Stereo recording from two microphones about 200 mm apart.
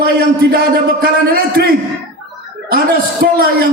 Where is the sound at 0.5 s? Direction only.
50° right (ahead or behind).